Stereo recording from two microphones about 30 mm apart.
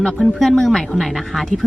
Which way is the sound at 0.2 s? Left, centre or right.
Centre.